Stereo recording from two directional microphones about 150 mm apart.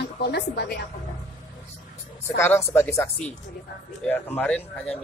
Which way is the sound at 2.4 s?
15° left (ahead or behind).